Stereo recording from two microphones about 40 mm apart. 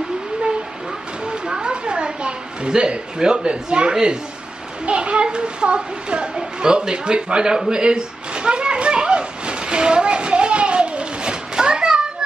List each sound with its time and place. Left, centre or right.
1.2 s a sound: right
3.9 s a man's voice: centre
4.8 s children playing: right